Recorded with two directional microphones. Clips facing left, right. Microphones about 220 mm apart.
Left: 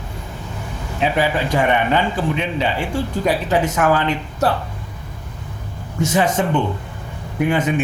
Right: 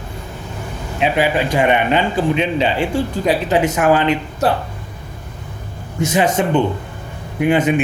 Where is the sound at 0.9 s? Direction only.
20° right (ahead or behind).